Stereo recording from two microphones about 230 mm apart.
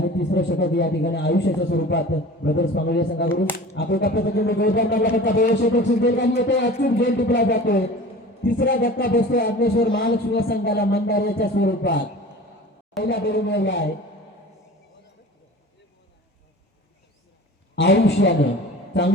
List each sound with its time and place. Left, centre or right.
0.0 s speech: left
8.4 s music: left
10.0 s speech: left
17.7 s speech: left